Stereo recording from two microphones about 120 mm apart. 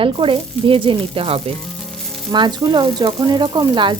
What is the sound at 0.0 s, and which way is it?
Speech, 45° right (ahead or behind).